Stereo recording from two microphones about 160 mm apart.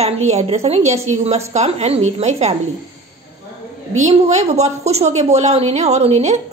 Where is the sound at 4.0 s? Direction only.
45° right (ahead or behind).